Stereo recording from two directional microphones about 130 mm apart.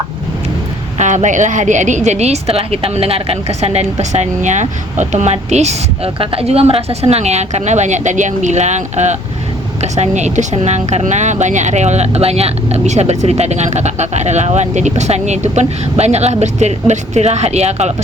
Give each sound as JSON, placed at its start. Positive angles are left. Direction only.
{"t": 0.9, "sound": "a woman's voice", "side_deg": -70}